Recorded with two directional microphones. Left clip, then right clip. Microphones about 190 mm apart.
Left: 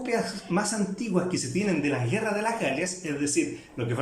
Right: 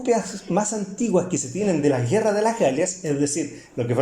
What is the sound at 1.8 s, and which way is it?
A man's voice, 30° right (ahead or behind).